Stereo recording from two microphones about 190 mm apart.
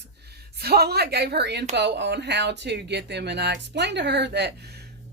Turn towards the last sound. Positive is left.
turn(degrees=-65)  # may be behind; listen again after turning